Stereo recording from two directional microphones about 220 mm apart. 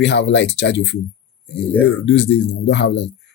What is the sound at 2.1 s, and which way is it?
Speech, 50° left (ahead or behind).